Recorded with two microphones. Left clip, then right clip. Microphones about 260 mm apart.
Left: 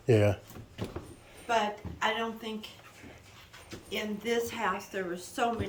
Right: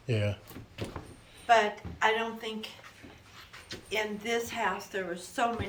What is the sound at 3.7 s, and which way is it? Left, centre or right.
A woman's voice, centre.